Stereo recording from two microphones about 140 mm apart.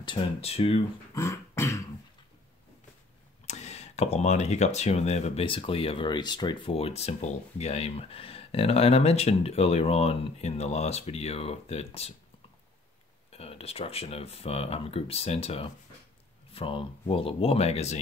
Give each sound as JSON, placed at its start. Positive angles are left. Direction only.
{"t": 0.0, "sound": "speech", "side_deg": 35}
{"t": 1.1, "sound": "beatboxing", "side_deg": 20}
{"t": 3.4, "sound": "speech", "side_deg": 55}
{"t": 13.3, "sound": "speech", "side_deg": 45}